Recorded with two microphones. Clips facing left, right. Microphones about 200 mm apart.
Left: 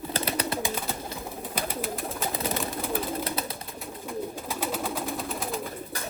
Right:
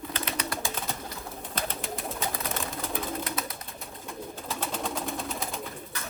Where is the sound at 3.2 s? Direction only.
30° left (ahead or behind).